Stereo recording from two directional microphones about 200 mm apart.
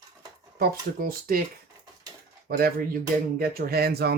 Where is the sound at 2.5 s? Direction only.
50° right (ahead or behind).